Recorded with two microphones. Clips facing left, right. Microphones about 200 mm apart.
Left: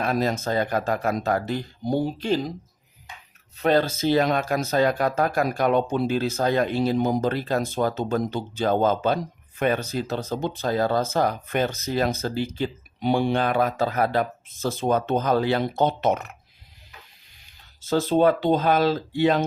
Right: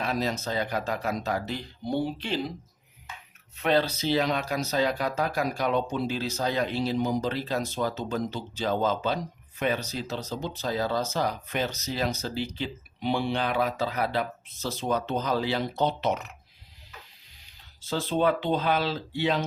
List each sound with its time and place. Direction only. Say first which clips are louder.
0.0 s speech: left 5 dB; 50° left (ahead or behind)
3.6 s speech: left 4 dB; 45° left (ahead or behind)
17.8 s speech: left 6 dB; 45° left (ahead or behind)